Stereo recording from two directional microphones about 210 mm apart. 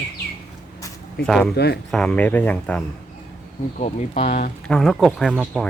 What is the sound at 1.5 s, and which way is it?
Speech, 50° left (ahead or behind).